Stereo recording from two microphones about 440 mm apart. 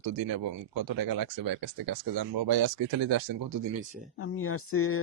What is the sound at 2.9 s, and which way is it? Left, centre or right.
Speech, right.